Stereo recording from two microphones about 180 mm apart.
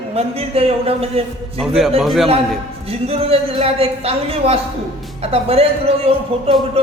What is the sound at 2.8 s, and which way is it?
A woman's voice, 35° right (ahead or behind).